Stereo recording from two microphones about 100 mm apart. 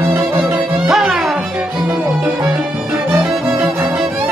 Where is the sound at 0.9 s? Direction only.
5° right (ahead or behind).